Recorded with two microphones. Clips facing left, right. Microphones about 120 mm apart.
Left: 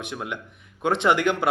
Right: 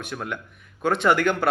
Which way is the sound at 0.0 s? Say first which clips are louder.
Even; 20° left (ahead or behind).